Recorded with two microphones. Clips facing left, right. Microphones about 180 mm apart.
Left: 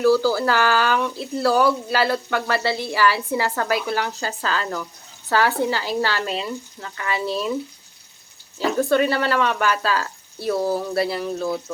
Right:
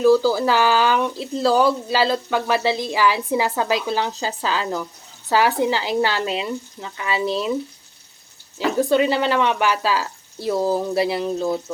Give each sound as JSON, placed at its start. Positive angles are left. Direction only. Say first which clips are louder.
{"t": 0.0, "sound": "speech", "louder": "right 2 dB", "side_deg": -15}
{"t": 6.2, "sound": "speech", "louder": "right 2 dB", "side_deg": -5}
{"t": 6.8, "sound": "speech", "louder": "right 2 dB", "side_deg": -15}
{"t": 8.5, "sound": "speech", "louder": "right 1 dB", "side_deg": -15}